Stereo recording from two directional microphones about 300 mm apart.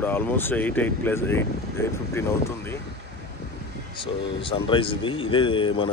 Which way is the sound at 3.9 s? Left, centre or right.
Centre.